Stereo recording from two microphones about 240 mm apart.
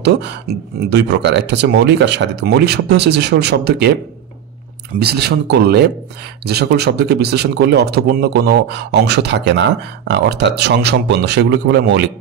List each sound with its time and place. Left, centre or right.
0.0 s speech: right
5.0 s speech: right